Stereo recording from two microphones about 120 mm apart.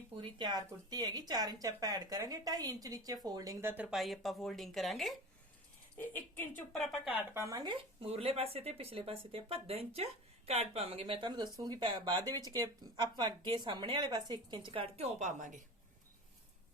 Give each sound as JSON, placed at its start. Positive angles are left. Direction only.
{"t": 0.2, "sound": "speech", "side_deg": -40}
{"t": 3.6, "sound": "speech", "side_deg": -20}
{"t": 3.9, "sound": "speech", "side_deg": 0}
{"t": 6.7, "sound": "speech", "side_deg": 0}
{"t": 7.1, "sound": "speech", "side_deg": -15}
{"t": 7.4, "sound": "speech", "side_deg": -35}
{"t": 8.0, "sound": "speech", "side_deg": -60}